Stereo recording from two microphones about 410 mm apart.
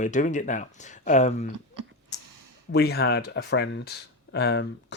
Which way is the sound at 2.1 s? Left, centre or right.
Left.